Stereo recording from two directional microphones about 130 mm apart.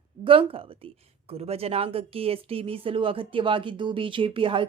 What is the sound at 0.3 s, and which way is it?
Speech, 45° right (ahead or behind).